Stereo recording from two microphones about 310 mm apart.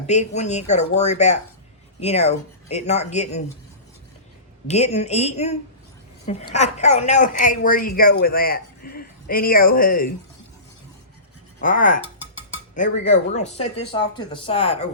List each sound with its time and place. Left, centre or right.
0.1 s a woman's voice: left
4.7 s a woman's voice: left
11.6 s a woman's voice: left